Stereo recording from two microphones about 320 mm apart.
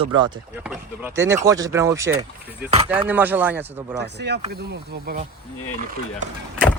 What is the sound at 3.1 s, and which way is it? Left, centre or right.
Speech, centre.